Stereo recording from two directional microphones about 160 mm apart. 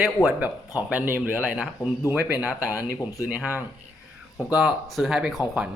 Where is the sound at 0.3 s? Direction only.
10° right (ahead or behind).